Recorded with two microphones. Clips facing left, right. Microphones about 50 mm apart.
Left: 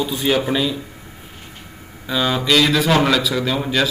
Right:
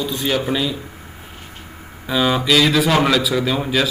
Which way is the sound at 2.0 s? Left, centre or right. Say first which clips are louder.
Right 2 dB; centre.